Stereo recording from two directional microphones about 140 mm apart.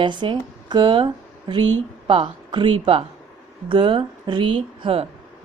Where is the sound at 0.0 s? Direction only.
35° right (ahead or behind).